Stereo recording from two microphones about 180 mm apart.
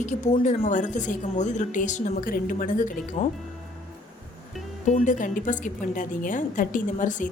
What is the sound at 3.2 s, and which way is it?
Speech, 30° left (ahead or behind).